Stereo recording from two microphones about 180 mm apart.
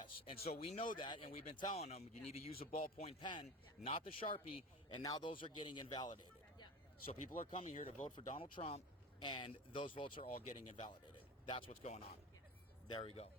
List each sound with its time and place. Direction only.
0.0 s a sound: 35° left (ahead or behind)
0.6 s a man's voice: 35° left (ahead or behind)
7.1 s speech: 45° left (ahead or behind)
8.3 s a man's voice: 35° left (ahead or behind)